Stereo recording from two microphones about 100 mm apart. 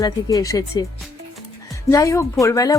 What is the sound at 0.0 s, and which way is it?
Speech, 35° left (ahead or behind).